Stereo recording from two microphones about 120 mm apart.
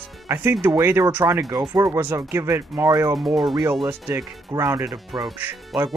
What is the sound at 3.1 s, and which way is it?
Speech, centre (ahead or behind).